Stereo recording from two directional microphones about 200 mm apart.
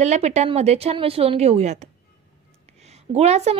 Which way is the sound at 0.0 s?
35° right (ahead or behind).